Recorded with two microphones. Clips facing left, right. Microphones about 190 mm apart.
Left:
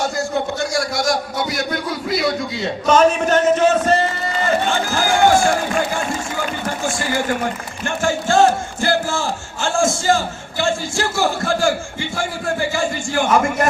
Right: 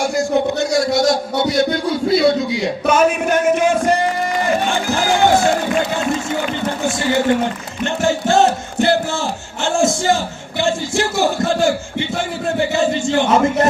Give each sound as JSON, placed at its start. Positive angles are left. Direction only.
{"t": 0.0, "sound": "a sound", "side_deg": -15}
{"t": 4.4, "sound": "music", "side_deg": -15}
{"t": 7.9, "sound": "speech", "side_deg": -20}